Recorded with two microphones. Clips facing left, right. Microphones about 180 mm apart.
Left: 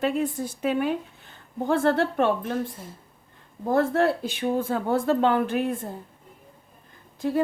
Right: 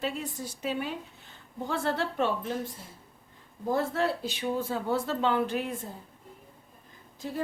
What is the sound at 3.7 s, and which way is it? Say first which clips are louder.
Speech: left 6 dB; 55° left (ahead or behind).